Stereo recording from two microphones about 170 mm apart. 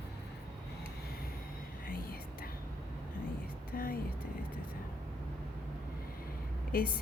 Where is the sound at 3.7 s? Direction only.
60° left (ahead or behind).